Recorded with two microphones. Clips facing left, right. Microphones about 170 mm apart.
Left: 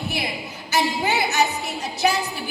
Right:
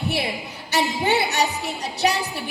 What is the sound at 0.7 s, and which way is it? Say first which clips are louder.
Speech: right 1 dB; 30° right (ahead or behind).